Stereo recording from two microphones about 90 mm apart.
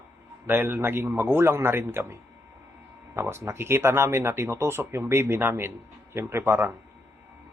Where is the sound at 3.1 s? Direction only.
30° right (ahead or behind).